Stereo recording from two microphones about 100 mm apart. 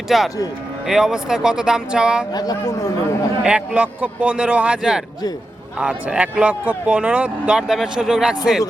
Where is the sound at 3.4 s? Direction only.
10° right (ahead or behind).